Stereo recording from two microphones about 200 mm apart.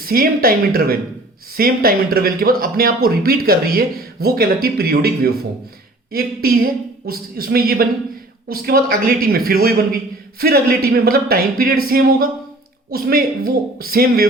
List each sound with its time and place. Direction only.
0.0 s speech: 45° right (ahead or behind)